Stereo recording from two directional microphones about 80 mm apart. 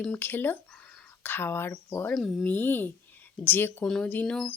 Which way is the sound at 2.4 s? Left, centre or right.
Left.